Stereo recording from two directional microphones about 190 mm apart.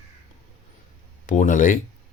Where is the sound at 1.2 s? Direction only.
45° left (ahead or behind).